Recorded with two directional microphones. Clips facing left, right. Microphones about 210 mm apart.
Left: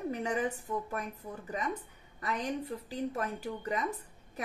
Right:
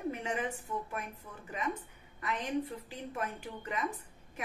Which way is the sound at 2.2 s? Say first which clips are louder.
Even; 40° left (ahead or behind).